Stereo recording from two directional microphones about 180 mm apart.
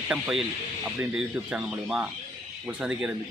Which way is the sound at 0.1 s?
5° right (ahead or behind).